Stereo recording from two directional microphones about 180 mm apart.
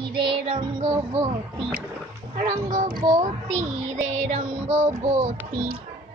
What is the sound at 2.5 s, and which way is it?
Speech, 40° right (ahead or behind).